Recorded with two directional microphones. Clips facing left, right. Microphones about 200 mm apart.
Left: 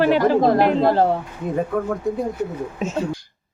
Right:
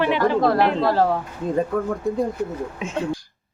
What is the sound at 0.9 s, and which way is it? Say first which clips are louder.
Speech: left 2 dB; 25° left (ahead or behind).